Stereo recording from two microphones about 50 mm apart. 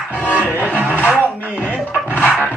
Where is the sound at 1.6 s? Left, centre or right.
Left.